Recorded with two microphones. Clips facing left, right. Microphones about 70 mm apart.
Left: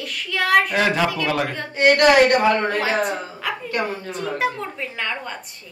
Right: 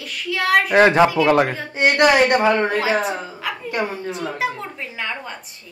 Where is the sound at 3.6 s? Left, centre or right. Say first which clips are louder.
Right 2 dB; centre.